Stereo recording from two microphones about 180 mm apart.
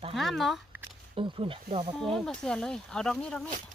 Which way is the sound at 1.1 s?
30° right (ahead or behind).